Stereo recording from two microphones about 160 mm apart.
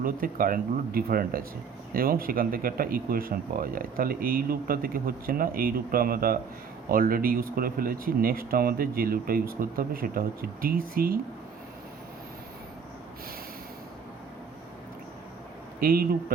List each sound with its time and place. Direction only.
0.0 s speech: 60° right (ahead or behind)
15.8 s a man's voice: 65° right (ahead or behind)